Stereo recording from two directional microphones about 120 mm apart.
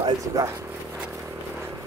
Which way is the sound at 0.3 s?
25° right (ahead or behind).